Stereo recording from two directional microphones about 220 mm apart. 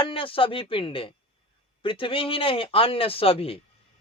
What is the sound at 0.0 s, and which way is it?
Speech, 25° left (ahead or behind).